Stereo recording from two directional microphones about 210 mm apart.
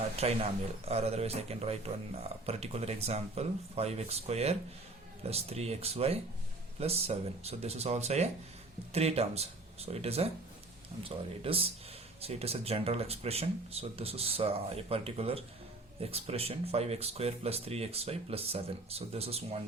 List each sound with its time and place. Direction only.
0.2 s speech: 30° right (ahead or behind)